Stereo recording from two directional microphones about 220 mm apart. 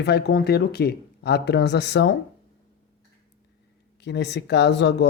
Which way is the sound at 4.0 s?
50° left (ahead or behind).